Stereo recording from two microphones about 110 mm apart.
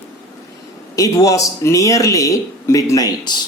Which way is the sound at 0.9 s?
35° left (ahead or behind).